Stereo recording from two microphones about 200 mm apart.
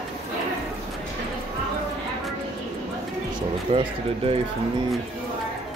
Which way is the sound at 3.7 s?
30° right (ahead or behind).